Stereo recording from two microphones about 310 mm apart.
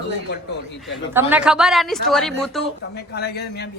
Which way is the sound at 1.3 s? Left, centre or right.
Centre.